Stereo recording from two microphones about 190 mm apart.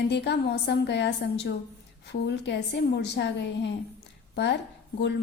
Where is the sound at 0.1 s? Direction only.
60° left (ahead or behind).